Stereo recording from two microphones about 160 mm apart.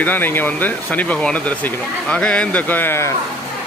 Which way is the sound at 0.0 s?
10° left (ahead or behind).